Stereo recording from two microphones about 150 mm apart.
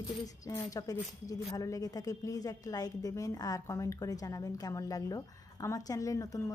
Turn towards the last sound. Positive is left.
turn(degrees=20)  # may be behind; listen again after turning